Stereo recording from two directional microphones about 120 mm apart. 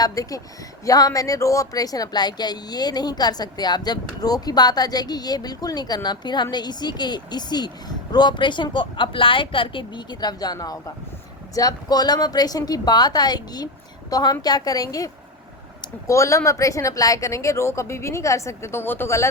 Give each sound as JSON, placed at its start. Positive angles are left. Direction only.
{"t": 0.0, "sound": "speech", "side_deg": 30}